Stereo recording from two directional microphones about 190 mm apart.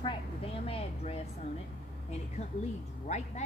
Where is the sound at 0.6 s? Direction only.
30° left (ahead or behind).